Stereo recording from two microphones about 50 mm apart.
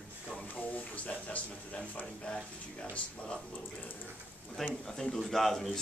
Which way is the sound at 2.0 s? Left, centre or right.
Centre.